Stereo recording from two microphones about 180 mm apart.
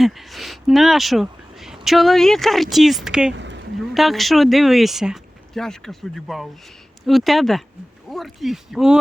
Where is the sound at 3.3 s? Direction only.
80° right.